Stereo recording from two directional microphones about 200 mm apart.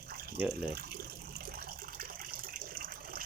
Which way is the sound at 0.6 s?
50° right (ahead or behind).